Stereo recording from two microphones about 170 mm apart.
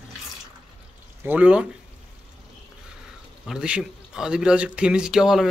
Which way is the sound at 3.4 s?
5° right (ahead or behind).